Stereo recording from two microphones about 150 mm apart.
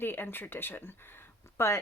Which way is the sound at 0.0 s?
15° left (ahead or behind).